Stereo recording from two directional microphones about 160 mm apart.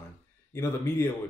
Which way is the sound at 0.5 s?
15° left (ahead or behind).